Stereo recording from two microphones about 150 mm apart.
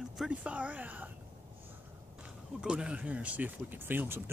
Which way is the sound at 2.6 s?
5° right (ahead or behind).